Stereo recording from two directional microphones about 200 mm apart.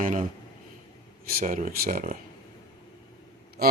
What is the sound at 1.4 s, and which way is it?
Speech, 40° right (ahead or behind).